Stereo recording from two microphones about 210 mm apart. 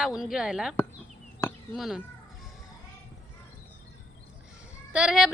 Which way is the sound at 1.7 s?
Centre (ahead or behind).